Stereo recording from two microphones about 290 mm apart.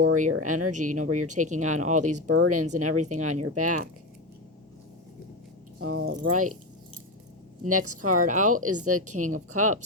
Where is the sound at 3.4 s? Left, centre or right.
Right.